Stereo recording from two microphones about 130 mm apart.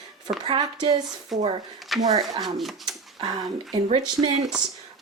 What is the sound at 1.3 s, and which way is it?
Speech, centre (ahead or behind).